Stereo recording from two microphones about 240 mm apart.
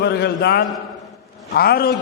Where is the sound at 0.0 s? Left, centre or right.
Left.